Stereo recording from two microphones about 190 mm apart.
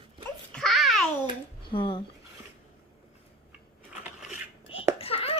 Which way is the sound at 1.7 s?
25° left (ahead or behind).